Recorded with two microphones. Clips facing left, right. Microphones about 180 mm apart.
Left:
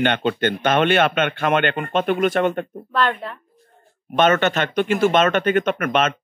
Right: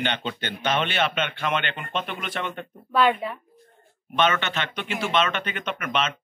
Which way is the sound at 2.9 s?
5° right (ahead or behind).